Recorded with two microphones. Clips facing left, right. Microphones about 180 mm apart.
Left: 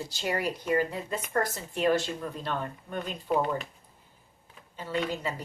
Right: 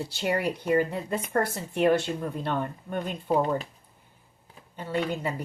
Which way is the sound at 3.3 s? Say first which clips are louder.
Right 3 dB; 35° right (ahead or behind).